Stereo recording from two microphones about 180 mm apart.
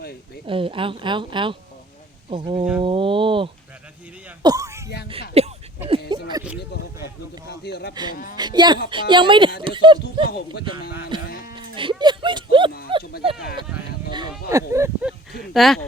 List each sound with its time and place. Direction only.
0.4 s speech: 30° right (ahead or behind)
4.4 s throat clearing: 20° right (ahead or behind)
5.4 s a sound: 35° right (ahead or behind)
6.1 s speech: 25° right (ahead or behind)
7.4 s speech: 65° left (ahead or behind)
8.1 s speech: 50° left (ahead or behind)
8.4 s speech: 25° right (ahead or behind)
11.3 s livestock: 55° left (ahead or behind)
11.7 s speech: 30° right (ahead or behind)
14.1 s speech: 25° right (ahead or behind)
15.5 s speech: centre (ahead or behind)